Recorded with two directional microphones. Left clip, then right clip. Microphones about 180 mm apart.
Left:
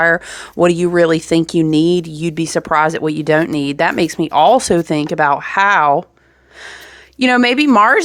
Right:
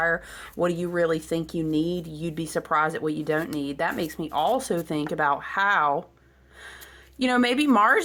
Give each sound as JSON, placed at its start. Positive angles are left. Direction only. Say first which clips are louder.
{"t": 0.0, "sound": "speech", "louder": "left 11 dB", "side_deg": 50}
{"t": 7.2, "sound": "speech", "louder": "left 10 dB", "side_deg": 40}